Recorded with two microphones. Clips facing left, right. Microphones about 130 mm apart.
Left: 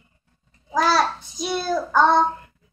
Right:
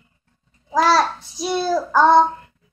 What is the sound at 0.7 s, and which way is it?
Child singing, centre (ahead or behind).